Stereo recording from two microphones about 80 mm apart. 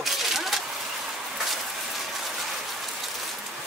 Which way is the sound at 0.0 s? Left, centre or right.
Centre.